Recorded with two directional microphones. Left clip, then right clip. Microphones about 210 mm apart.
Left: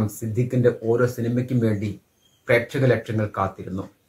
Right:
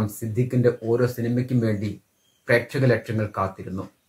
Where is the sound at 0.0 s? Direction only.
10° left (ahead or behind).